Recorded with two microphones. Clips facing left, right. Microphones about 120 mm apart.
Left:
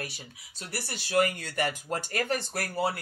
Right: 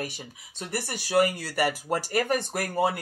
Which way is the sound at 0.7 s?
10° right (ahead or behind).